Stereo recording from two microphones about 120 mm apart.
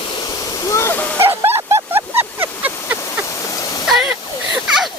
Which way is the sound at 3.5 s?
30° left (ahead or behind).